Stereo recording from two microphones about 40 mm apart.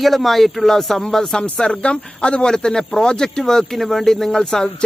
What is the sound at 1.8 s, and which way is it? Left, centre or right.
A man's voice, left.